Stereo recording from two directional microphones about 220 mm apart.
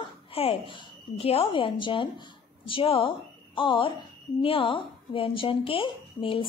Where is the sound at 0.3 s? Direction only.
25° left (ahead or behind).